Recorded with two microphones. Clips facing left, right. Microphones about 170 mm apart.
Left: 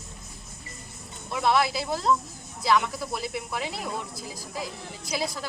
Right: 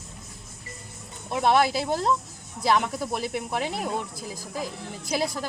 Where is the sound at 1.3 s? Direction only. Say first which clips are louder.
Right 3 dB; 50° right (ahead or behind).